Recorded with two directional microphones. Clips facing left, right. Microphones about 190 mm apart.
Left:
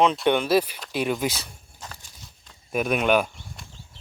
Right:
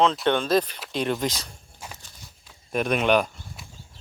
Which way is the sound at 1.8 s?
10° right (ahead or behind).